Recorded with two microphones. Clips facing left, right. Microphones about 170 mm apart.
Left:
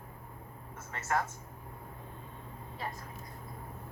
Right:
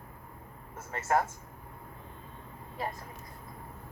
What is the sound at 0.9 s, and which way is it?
Speech, 45° right (ahead or behind).